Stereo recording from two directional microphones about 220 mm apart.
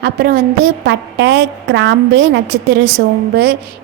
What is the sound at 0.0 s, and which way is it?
A woman's voice, 45° right (ahead or behind).